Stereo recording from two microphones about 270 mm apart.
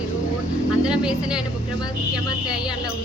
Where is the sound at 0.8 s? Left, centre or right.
Centre.